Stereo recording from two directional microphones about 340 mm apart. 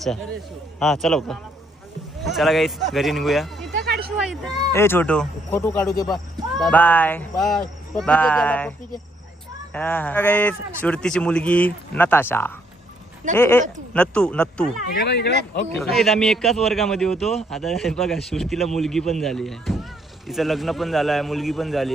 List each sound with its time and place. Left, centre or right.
0.8 s a man's voice: centre
3.8 s a sound: right
4.1 s a man's voice: centre
9.7 s a man's voice: centre
14.9 s speech: left
15.8 s a man's voice: centre